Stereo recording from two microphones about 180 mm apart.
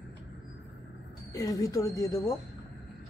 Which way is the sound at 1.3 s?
20° left (ahead or behind).